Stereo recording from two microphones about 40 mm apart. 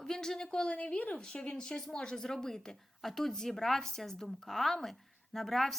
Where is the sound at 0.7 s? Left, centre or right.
Left.